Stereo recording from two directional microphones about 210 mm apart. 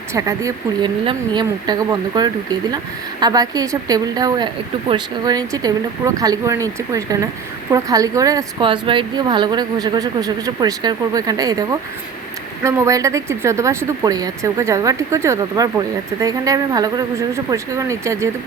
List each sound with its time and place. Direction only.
0.1 s a woman's voice: 15° right (ahead or behind)
12.6 s a woman's voice: 15° right (ahead or behind)